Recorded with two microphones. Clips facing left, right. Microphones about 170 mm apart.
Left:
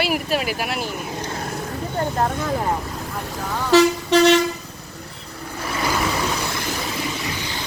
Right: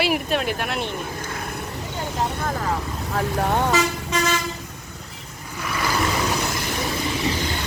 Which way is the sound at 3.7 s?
70° left (ahead or behind).